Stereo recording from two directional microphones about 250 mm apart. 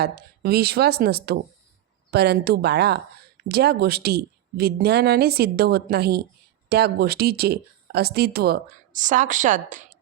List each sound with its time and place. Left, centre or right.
0.0 s speech: right